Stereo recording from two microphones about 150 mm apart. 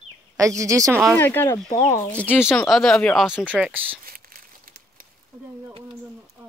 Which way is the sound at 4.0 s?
75° right (ahead or behind).